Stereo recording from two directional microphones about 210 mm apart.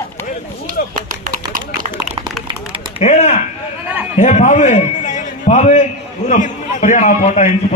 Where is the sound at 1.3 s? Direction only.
40° right (ahead or behind).